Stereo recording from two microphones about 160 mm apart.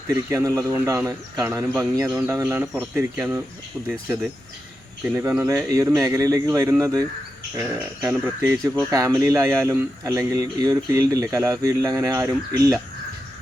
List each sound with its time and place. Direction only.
0.3 s speech: 15° right (ahead or behind)
3.8 s speech: centre (ahead or behind)
5.0 s a man's voice: 15° right (ahead or behind)